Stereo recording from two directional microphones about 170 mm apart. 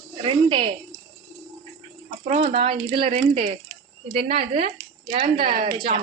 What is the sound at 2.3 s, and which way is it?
A woman's voice, 35° right (ahead or behind).